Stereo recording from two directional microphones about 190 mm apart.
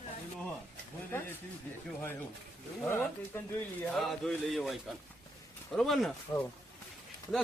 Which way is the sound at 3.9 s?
Centre (ahead or behind).